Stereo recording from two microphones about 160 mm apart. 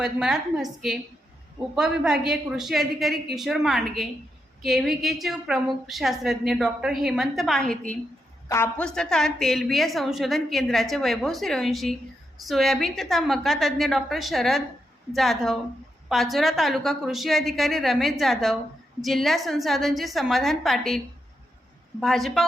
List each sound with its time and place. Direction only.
0.0 s a woman's voice: 5° right (ahead or behind)
8.4 s a woman's voice: 15° left (ahead or behind)
8.8 s a woman's voice: 5° left (ahead or behind)
22.0 s a woman's voice: centre (ahead or behind)